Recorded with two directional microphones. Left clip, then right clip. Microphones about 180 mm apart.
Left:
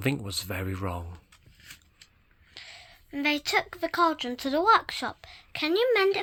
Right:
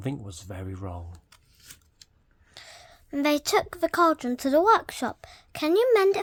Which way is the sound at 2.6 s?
45° right (ahead or behind).